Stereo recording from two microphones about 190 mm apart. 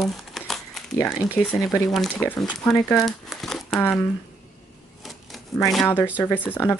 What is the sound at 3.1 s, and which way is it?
Crumpling, centre (ahead or behind).